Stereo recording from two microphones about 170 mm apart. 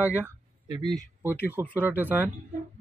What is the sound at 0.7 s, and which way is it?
Speech, 25° right (ahead or behind).